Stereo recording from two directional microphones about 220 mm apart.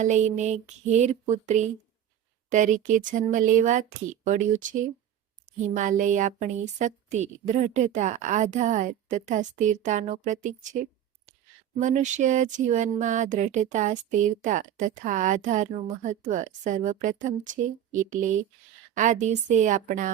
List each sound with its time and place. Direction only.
0.0 s speech: 35° right (ahead or behind)
11.8 s speech: 35° right (ahead or behind)